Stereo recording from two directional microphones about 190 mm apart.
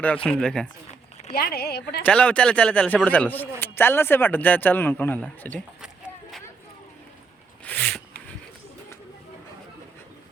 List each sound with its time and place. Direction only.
0.0 s speech: 5° left (ahead or behind)
1.4 s speech: 55° left (ahead or behind)
2.0 s speech: 5° left (ahead or behind)
7.6 s a sound: 5° left (ahead or behind)